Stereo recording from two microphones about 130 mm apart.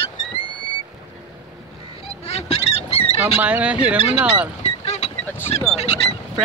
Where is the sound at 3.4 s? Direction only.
10° right (ahead or behind).